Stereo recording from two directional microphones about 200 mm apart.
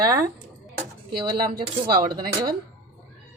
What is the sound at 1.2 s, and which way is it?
Speech, 25° right (ahead or behind).